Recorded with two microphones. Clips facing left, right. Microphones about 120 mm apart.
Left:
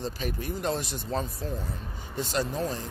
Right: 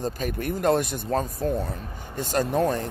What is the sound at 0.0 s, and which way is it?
Speech, 50° right (ahead or behind).